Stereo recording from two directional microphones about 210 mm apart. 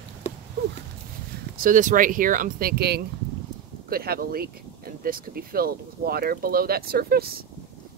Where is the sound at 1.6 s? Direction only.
40° right (ahead or behind).